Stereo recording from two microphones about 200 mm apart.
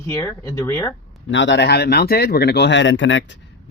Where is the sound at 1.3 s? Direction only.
65° left (ahead or behind).